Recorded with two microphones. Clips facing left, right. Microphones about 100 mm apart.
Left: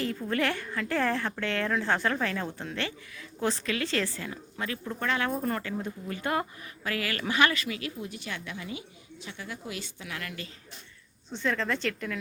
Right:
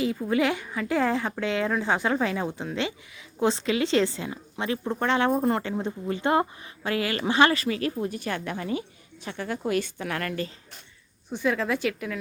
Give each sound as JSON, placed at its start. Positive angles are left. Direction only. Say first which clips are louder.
{"t": 0.0, "sound": "a woman's voice", "louder": "right 5 dB", "side_deg": -10}
{"t": 11.3, "sound": "a woman's voice", "louder": "right 4 dB", "side_deg": -10}